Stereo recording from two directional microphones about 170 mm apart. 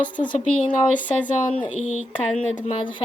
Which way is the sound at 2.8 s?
30° left (ahead or behind).